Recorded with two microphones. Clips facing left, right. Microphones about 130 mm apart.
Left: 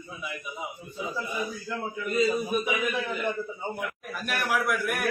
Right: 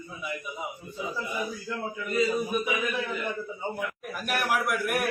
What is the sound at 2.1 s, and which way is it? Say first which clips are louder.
A man's voice: left 1 dB; 20° left (ahead or behind).